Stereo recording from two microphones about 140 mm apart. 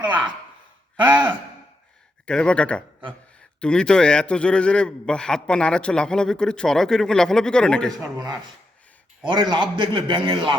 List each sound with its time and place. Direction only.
1.0 s a man's voice: 30° right (ahead or behind)
2.2 s a man's voice: 5° left (ahead or behind)
9.2 s a man's voice: 30° right (ahead or behind)